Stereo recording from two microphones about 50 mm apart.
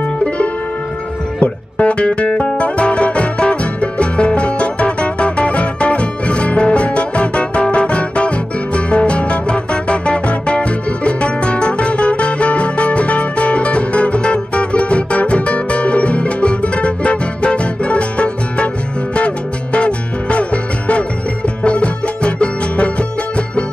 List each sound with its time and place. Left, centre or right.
1.4 s music: left